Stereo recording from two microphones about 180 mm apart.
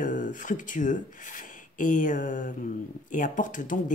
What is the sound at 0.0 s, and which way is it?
Speech, 45° left (ahead or behind).